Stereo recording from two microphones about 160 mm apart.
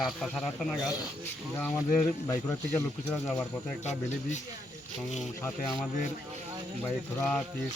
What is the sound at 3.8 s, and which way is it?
Speech, 45° left (ahead or behind).